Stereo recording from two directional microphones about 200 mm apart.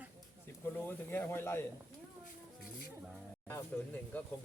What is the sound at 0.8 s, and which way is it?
Speech, 10° left (ahead or behind).